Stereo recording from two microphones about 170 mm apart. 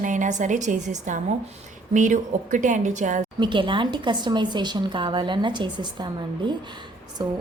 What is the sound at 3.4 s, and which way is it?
A woman's voice, 30° right (ahead or behind).